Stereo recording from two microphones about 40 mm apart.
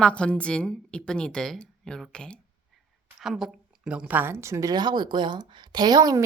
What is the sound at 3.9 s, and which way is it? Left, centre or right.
Speech, centre.